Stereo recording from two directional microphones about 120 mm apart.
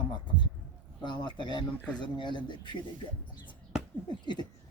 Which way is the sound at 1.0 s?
40° left (ahead or behind).